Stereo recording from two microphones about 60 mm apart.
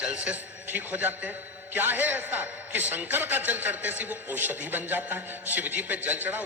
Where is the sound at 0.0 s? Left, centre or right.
Centre.